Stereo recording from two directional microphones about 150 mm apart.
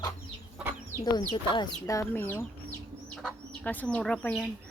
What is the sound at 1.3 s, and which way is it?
Speech, 30° left (ahead or behind).